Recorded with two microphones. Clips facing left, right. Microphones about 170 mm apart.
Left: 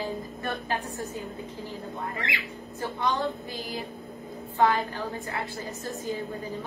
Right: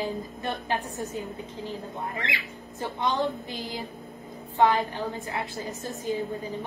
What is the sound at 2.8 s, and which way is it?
A woman's voice, 20° right (ahead or behind).